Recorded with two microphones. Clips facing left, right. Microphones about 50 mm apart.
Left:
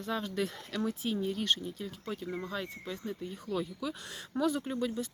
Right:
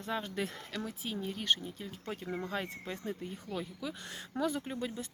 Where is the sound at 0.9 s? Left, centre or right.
Centre.